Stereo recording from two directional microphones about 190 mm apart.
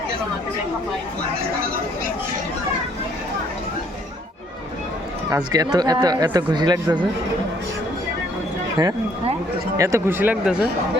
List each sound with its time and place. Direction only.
5.3 s speech: 20° right (ahead or behind)
9.7 s speech: 15° right (ahead or behind)